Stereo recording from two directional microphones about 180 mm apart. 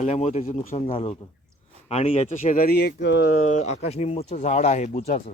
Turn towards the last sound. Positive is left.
turn(degrees=45)  # may be behind; listen again after turning